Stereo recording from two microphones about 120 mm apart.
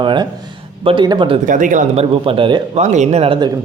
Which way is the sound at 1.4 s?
90° right.